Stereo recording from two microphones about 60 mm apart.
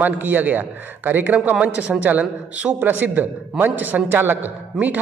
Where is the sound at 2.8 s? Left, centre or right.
Right.